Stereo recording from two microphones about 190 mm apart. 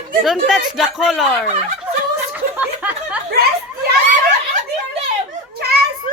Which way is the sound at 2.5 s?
5° right (ahead or behind).